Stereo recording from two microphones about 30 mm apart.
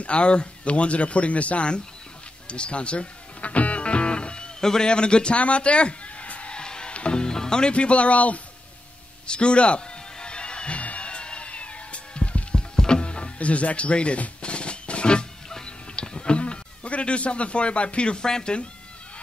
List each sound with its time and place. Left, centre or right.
0.0 s speech: left
2.4 s music: left
4.6 s a man's voice: centre
4.8 s speech: left
5.4 s a sound: left
6.5 s music: left
7.7 s speech: left
9.3 s speech: left
10.1 s music: left
10.8 s music: left
12.7 s music: left
13.4 s speech: left
14.4 s music: left
18.2 s speech: left